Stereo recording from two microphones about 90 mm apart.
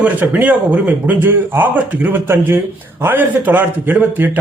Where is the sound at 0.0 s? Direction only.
20° right (ahead or behind).